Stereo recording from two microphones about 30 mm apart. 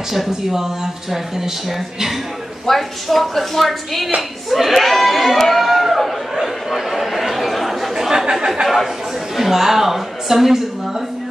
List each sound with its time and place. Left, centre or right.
0.1 s speech: centre
2.6 s a woman's voice: centre
5.5 s chatter: centre
7.9 s a sound: centre
9.4 s a woman's voice: centre